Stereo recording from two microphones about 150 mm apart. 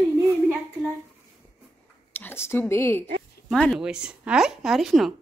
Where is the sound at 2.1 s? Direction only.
15° left (ahead or behind).